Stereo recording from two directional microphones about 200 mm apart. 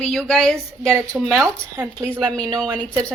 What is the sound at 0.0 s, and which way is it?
Speech, 5° left (ahead or behind).